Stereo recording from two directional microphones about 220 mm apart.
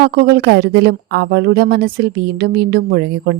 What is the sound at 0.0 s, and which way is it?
Speech, 45° right (ahead or behind).